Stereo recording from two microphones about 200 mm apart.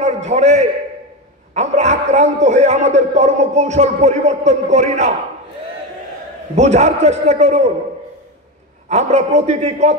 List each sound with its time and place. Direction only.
0.0 s a man's voice: 35° right (ahead or behind)
6.5 s a man's voice: 35° right (ahead or behind)
8.8 s a man's voice: 35° right (ahead or behind)